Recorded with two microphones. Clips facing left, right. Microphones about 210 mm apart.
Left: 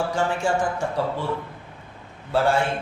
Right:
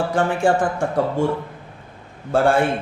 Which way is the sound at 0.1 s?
55° right (ahead or behind).